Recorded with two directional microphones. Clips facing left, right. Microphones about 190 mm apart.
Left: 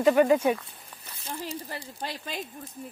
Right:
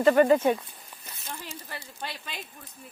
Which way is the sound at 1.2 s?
35° left (ahead or behind).